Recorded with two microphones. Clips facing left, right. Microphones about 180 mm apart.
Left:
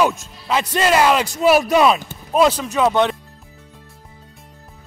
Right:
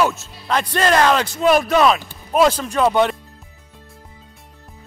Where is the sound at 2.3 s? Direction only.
Centre (ahead or behind).